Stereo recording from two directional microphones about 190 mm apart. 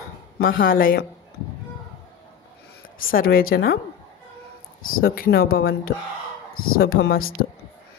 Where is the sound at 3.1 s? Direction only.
50° left (ahead or behind).